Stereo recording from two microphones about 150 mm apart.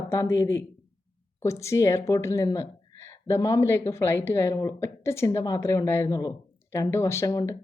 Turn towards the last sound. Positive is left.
turn(degrees=20)  # may be behind; listen again after turning